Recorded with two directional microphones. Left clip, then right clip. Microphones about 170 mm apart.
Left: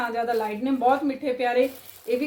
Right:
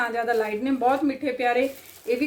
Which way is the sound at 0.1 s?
25° right (ahead or behind).